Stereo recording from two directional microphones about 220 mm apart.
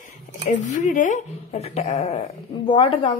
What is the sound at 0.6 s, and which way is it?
Speech, 35° left (ahead or behind).